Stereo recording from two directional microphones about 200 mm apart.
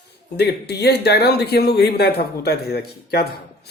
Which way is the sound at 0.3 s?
55° left (ahead or behind).